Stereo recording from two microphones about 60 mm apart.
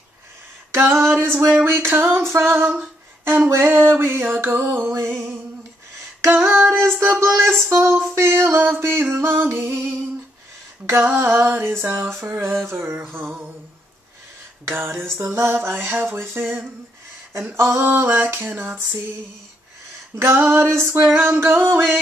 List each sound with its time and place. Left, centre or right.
0.7 s music: right
2.2 s female singing: right
2.8 s humming: right
3.4 s music: right
6.2 s female singing: right
7.7 s music: right
10.9 s music: right
14.7 s music: right
17.6 s female singing: right
18.1 s music: right
20.2 s female singing: right